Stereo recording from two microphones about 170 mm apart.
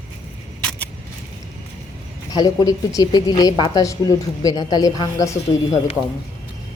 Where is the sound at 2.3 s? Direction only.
20° left (ahead or behind).